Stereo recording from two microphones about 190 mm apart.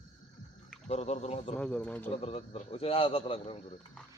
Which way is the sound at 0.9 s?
35° left (ahead or behind).